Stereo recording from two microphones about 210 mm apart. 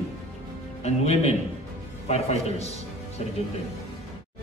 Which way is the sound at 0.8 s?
30° left (ahead or behind).